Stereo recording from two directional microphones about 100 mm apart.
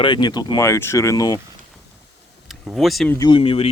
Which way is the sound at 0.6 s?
30° left (ahead or behind).